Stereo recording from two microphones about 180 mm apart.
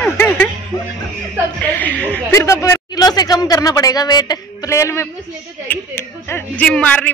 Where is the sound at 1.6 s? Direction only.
10° left (ahead or behind).